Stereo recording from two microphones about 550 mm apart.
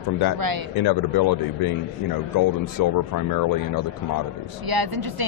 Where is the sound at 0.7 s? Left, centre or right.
Left.